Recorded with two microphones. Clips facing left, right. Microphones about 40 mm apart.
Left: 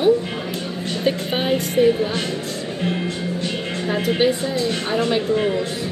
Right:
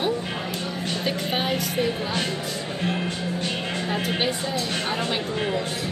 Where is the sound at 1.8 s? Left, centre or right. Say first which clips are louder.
Left 8 dB; left.